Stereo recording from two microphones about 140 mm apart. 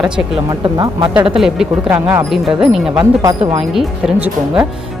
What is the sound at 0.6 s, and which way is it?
Speech, 30° right (ahead or behind).